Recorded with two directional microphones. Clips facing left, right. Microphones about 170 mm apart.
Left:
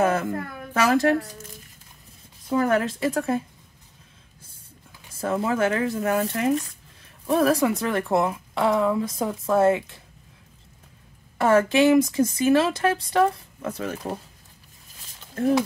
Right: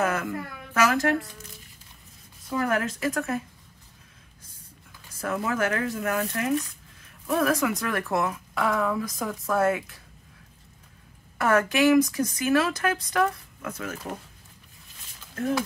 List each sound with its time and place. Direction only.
0.0 s a sound: 30° left (ahead or behind)
0.7 s a woman's voice: 30° left (ahead or behind)
2.5 s speech: 25° left (ahead or behind)
5.1 s speech: 25° left (ahead or behind)
11.3 s speech: 25° left (ahead or behind)